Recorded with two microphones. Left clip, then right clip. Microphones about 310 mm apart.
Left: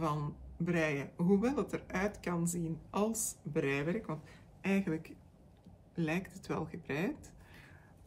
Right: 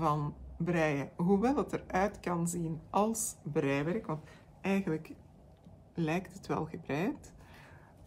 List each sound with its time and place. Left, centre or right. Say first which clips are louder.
0.0 s speech: right 5 dB; centre